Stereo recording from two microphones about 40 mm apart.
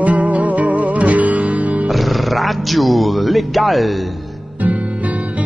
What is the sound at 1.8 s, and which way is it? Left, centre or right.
Music, centre.